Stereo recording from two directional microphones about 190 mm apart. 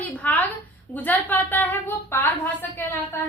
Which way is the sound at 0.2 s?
10° left (ahead or behind).